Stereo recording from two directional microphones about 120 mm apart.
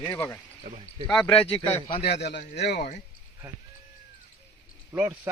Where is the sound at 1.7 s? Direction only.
60° left (ahead or behind); by 3.0 s 90° left.